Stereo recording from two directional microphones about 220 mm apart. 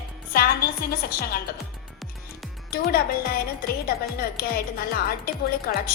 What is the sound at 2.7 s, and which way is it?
A woman's voice, 45° left (ahead or behind).